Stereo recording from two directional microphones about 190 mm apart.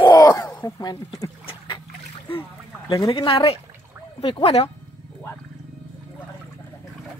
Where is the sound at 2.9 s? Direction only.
20° left (ahead or behind).